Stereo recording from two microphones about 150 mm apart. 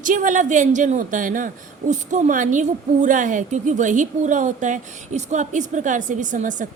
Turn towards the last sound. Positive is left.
turn(degrees=-55)  # may be behind; listen again after turning